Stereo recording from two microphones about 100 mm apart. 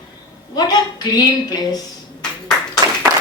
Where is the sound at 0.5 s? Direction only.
40° left (ahead or behind).